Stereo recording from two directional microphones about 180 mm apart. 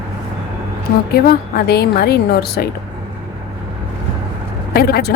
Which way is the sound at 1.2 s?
60° left (ahead or behind).